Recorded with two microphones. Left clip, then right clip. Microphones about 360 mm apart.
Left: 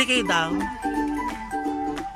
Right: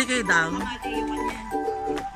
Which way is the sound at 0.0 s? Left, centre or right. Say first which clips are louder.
Even; centre.